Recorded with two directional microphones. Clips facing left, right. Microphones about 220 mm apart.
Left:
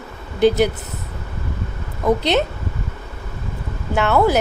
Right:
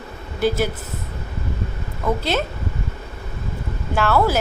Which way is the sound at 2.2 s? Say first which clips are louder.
Left 4 dB; 20° left (ahead or behind).